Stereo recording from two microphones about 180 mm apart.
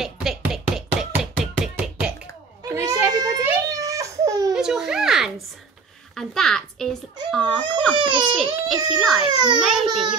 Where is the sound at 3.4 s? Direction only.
20° right (ahead or behind).